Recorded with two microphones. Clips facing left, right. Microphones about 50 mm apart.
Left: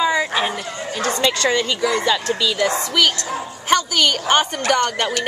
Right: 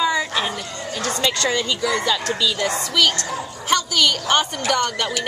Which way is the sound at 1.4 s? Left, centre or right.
Centre.